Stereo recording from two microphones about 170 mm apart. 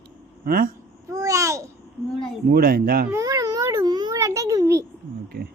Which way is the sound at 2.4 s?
65° right (ahead or behind).